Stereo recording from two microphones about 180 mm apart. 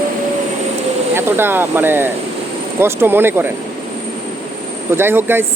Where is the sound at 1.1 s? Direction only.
10° right (ahead or behind).